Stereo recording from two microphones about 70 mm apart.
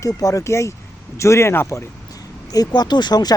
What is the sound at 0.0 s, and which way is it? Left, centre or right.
Speech, left.